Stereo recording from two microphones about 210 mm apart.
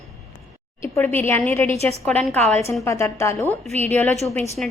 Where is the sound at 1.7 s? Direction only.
30° right (ahead or behind).